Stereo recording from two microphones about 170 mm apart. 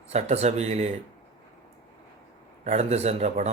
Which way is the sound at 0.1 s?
40° right (ahead or behind).